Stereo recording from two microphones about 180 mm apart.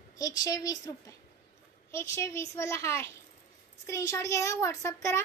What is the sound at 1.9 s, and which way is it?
A child's voice, 15° left (ahead or behind).